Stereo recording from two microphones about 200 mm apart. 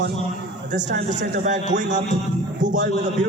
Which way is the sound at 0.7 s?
40° right (ahead or behind).